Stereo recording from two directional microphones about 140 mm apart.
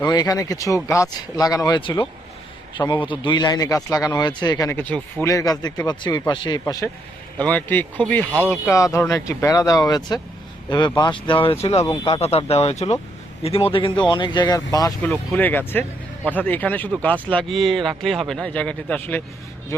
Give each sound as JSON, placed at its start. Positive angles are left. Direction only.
{"t": 0.1, "sound": "speech", "side_deg": 25}
{"t": 4.7, "sound": "speech", "side_deg": 10}
{"t": 5.2, "sound": "speech", "side_deg": 25}
{"t": 7.3, "sound": "speech", "side_deg": 10}
{"t": 15.0, "sound": "speech", "side_deg": 10}